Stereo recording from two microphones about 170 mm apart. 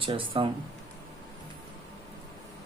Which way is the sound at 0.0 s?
30° right (ahead or behind).